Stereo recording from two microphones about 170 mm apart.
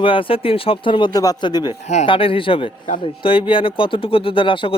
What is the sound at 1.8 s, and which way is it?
Speech, 40° left (ahead or behind).